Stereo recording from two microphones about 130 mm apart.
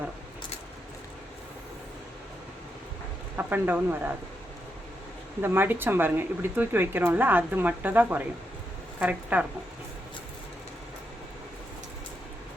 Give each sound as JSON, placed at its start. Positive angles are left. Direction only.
{"t": 3.3, "sound": "speech", "side_deg": -15}
{"t": 5.4, "sound": "speech", "side_deg": -15}